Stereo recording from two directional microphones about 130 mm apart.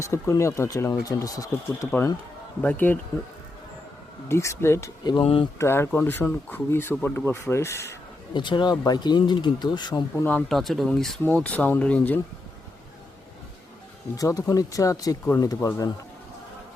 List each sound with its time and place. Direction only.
0.0 s speech: 20° left (ahead or behind)
2.6 s speech: 10° left (ahead or behind)
4.3 s speech: 20° left (ahead or behind)
5.2 s speech: 45° left (ahead or behind)
5.5 s speech: 20° left (ahead or behind)
8.3 s speech: 35° left (ahead or behind)
10.5 s speech: centre (ahead or behind)
14.2 s speech: 25° left (ahead or behind)